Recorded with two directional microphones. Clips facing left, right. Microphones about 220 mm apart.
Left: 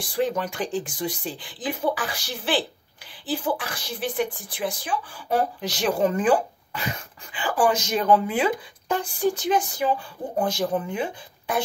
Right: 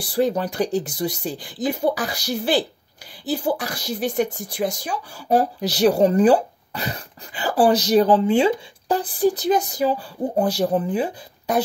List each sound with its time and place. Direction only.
0.0 s speech: 35° right (ahead or behind)